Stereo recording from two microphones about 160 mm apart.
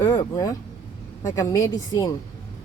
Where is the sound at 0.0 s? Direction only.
15° left (ahead or behind).